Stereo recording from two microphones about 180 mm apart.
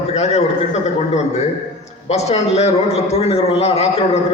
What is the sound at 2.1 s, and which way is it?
A man's voice, 35° left (ahead or behind).